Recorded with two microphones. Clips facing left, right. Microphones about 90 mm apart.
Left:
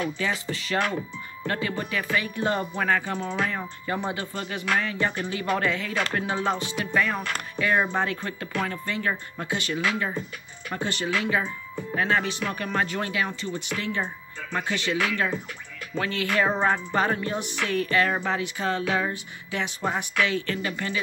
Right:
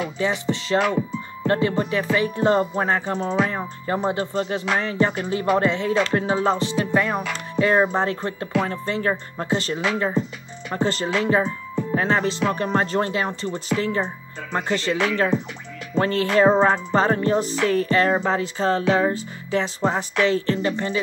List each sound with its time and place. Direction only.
0.0 s speech: 25° right (ahead or behind)
7.5 s music: 30° right (ahead or behind)